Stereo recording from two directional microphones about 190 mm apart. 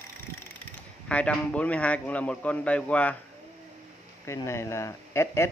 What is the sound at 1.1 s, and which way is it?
Speech, 5° left (ahead or behind).